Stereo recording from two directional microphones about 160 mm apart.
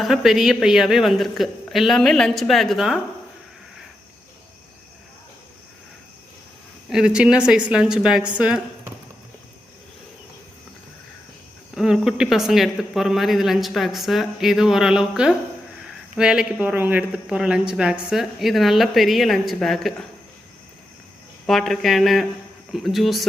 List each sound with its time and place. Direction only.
0.0 s speech: centre (ahead or behind)
6.9 s speech: 5° right (ahead or behind)
11.7 s speech: centre (ahead or behind)
21.4 s speech: centre (ahead or behind)